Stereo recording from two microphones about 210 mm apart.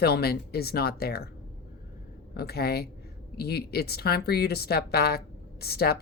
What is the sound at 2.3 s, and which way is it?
Speech, 50° left (ahead or behind).